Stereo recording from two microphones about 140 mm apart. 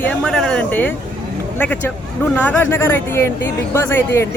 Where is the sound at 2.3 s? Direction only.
10° left (ahead or behind).